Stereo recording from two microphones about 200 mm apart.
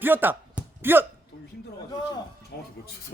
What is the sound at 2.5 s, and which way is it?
Speech, 55° left (ahead or behind).